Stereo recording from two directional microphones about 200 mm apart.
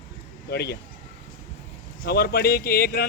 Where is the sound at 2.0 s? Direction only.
50° left (ahead or behind).